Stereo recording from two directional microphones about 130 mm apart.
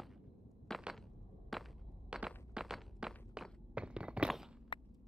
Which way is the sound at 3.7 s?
10° right (ahead or behind).